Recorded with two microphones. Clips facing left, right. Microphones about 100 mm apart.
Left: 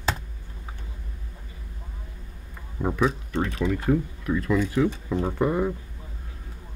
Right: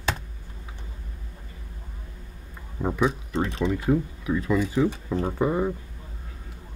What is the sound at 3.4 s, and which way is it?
Speech, 30° right (ahead or behind).